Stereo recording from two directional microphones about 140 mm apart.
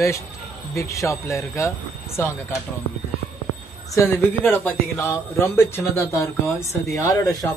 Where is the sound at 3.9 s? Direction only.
15° left (ahead or behind).